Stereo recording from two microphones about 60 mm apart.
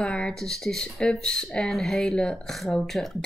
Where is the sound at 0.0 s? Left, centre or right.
Centre.